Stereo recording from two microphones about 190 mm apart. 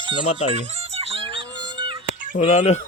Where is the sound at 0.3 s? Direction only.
35° left (ahead or behind).